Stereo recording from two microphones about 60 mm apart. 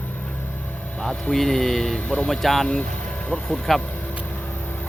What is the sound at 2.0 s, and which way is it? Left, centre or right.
Speech, centre.